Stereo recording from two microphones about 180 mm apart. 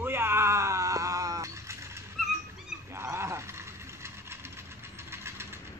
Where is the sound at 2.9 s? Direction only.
15° right (ahead or behind).